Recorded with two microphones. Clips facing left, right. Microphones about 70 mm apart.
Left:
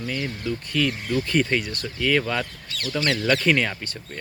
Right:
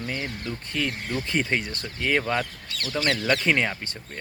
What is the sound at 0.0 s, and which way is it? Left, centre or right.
Speech, right.